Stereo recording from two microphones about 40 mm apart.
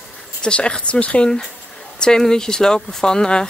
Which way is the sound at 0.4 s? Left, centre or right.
Left.